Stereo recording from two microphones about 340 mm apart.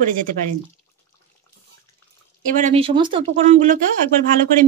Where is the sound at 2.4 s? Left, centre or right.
Right.